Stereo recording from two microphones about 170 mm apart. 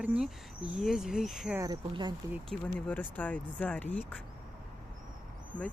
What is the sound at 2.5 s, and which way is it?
Speech, 5° left (ahead or behind).